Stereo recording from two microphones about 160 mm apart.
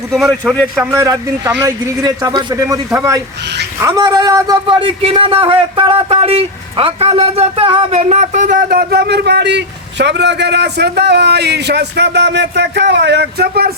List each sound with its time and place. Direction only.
0.1 s speech: centre (ahead or behind)
0.9 s a man's voice: 20° right (ahead or behind); by 13.7 s 75° right (ahead or behind)